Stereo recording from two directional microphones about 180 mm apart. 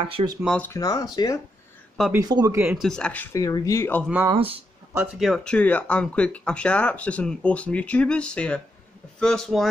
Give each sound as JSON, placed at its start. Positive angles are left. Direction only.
{"t": 0.0, "sound": "speech", "side_deg": -25}
{"t": 0.7, "sound": "speech", "side_deg": 20}
{"t": 2.1, "sound": "speech", "side_deg": -20}
{"t": 2.7, "sound": "speech", "side_deg": 0}
{"t": 3.4, "sound": "speech", "side_deg": 20}
{"t": 4.3, "sound": "speech", "side_deg": -30}
{"t": 5.2, "sound": "speech", "side_deg": 5}